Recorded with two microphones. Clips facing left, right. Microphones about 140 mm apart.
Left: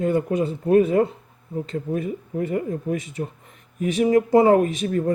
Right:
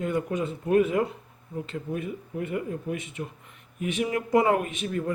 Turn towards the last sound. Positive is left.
turn(degrees=40)  # may be behind; listen again after turning